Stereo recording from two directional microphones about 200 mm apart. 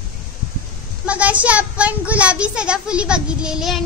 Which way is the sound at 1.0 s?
5° right (ahead or behind).